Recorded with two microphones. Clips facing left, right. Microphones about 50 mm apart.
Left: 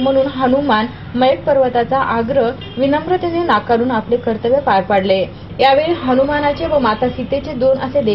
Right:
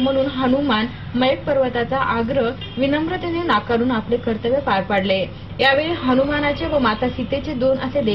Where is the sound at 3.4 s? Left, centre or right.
Left.